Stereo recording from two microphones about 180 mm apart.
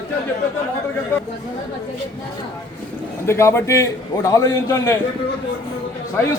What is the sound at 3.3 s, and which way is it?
A man's voice, 15° left (ahead or behind).